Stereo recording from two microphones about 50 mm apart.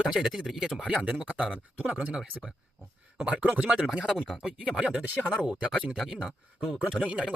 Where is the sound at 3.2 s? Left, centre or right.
Right.